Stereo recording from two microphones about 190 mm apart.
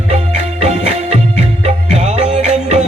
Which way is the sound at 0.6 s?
35° right (ahead or behind).